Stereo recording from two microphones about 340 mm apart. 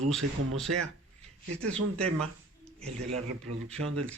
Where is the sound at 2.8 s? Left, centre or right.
Centre.